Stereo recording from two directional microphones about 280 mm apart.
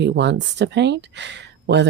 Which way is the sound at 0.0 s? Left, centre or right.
Right.